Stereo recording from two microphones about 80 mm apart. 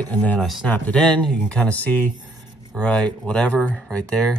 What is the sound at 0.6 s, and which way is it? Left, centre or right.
Speech, centre.